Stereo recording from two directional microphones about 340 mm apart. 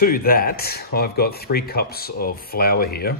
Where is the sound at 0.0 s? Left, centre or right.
Left.